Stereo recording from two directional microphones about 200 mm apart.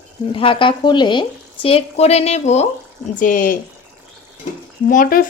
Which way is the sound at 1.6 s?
30° left (ahead or behind).